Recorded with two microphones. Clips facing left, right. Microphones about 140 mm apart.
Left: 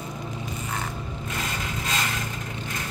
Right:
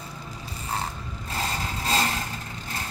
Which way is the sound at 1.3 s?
35° right (ahead or behind).